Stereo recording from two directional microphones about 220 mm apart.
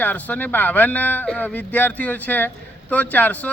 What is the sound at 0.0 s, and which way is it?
Speech, 5° left (ahead or behind).